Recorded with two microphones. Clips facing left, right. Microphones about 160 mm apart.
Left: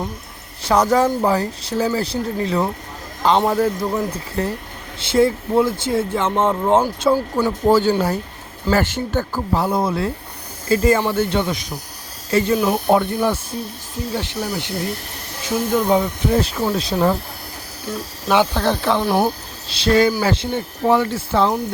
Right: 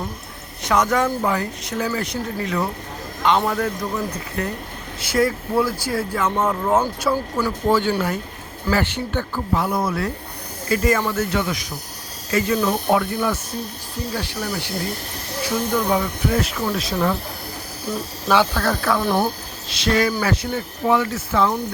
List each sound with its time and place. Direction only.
0.6 s speech: 30° left (ahead or behind)
7.7 s speech: 35° left (ahead or behind)
18.3 s speech: 20° left (ahead or behind)
19.0 s speech: 15° left (ahead or behind)
19.7 s speech: 30° left (ahead or behind)